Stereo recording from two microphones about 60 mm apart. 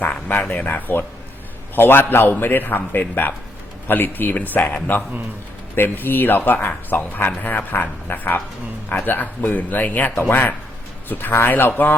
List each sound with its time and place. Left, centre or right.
0.0 s a man's voice: left